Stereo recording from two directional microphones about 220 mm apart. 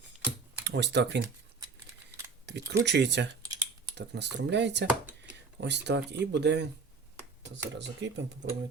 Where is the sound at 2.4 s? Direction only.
50° right (ahead or behind).